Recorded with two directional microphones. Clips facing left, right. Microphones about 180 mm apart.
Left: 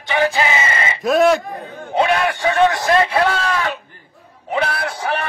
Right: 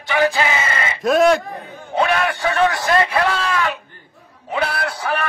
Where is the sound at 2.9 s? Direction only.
35° left (ahead or behind).